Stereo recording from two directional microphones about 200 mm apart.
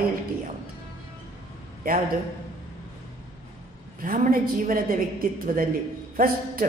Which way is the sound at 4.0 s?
40° right (ahead or behind).